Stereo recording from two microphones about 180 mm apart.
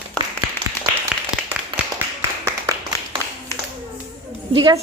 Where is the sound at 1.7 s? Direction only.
25° right (ahead or behind).